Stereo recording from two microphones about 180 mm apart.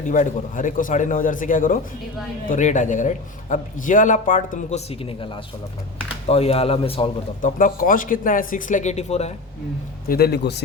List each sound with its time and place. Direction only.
0.1 s a man's voice: 45° left (ahead or behind)
7.6 s a man's voice: 50° left (ahead or behind)
10.1 s a man's voice: 60° left (ahead or behind)